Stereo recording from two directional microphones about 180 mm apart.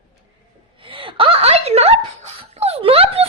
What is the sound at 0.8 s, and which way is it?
Speech, 30° right (ahead or behind).